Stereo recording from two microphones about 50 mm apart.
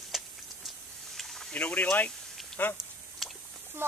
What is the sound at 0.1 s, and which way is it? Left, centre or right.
Tick-tock, centre.